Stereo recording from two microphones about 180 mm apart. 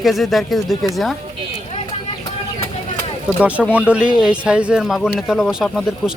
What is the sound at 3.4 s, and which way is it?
Speech, 5° right (ahead or behind).